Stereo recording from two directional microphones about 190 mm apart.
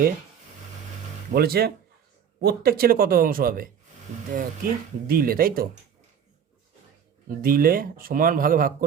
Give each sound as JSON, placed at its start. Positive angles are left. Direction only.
{"t": 1.3, "sound": "speech", "side_deg": -55}
{"t": 7.3, "sound": "speech", "side_deg": -50}